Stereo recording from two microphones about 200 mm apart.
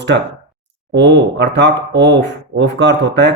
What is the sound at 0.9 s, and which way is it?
Speech, 60° right (ahead or behind).